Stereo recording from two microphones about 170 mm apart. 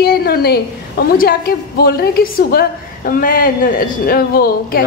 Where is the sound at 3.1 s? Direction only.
55° left (ahead or behind).